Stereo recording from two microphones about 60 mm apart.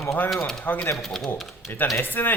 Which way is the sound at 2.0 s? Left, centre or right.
Left.